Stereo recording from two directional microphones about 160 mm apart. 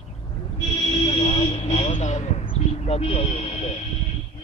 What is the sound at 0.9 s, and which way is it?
Speech, 35° left (ahead or behind).